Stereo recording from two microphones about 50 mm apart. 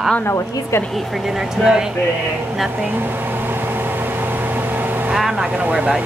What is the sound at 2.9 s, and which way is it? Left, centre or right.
Microwave oven, right.